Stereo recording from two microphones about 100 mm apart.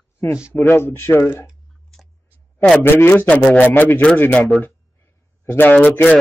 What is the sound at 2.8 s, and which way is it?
Speech, 20° left (ahead or behind).